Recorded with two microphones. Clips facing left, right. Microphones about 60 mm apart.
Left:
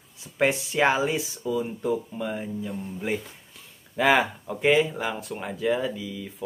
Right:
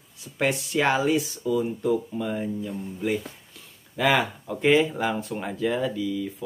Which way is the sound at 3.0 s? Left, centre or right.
Centre.